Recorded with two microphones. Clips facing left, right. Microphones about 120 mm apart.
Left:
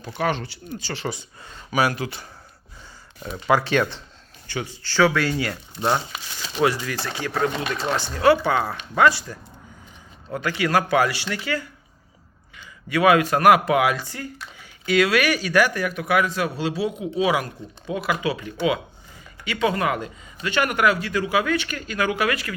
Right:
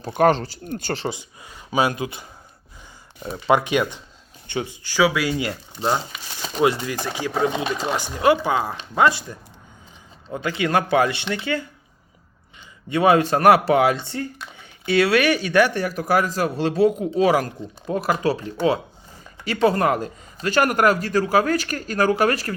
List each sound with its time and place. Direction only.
0.1 s speech: 45° right (ahead or behind)
0.6 s speech: 50° right (ahead or behind)
1.0 s speech: 15° right (ahead or behind)
3.3 s speech: 20° right (ahead or behind)
6.6 s speech: 20° right (ahead or behind); by 22.5 s 40° right (ahead or behind)